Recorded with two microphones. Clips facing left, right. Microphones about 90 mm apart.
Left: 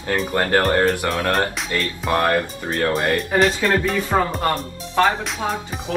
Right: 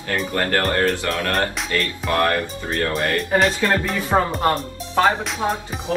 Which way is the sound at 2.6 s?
35° left (ahead or behind).